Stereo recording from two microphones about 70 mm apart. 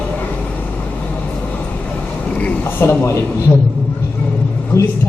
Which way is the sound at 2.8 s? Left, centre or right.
Left.